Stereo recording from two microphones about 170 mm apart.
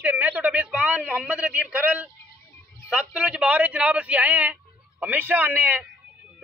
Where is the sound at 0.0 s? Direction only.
10° right (ahead or behind).